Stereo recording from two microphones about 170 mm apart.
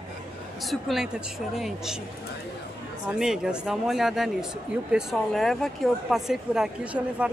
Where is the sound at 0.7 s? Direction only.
Centre (ahead or behind).